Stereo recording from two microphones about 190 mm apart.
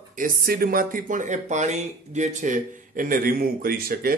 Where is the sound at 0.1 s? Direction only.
45° right (ahead or behind).